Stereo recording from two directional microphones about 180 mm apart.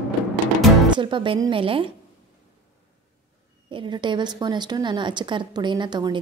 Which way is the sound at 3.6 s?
25° right (ahead or behind).